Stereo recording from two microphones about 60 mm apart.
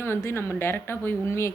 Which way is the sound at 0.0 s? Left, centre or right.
Left.